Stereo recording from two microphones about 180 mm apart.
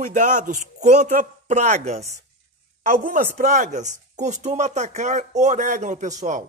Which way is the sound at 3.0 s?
50° right (ahead or behind).